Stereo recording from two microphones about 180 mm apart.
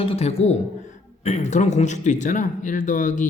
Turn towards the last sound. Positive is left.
turn(degrees=45)  # may be behind; listen again after turning